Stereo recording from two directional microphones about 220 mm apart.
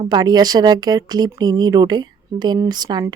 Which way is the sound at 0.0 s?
20° right (ahead or behind).